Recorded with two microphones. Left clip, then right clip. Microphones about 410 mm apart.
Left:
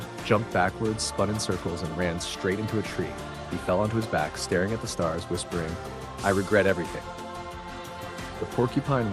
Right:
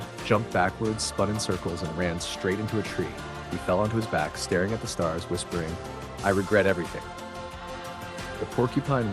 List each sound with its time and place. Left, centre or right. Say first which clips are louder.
0.3 s speech: even; centre
3.7 s speech: even; centre
8.5 s speech: even; centre